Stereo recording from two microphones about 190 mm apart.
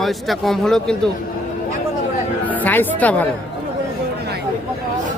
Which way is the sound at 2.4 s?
10° left (ahead or behind).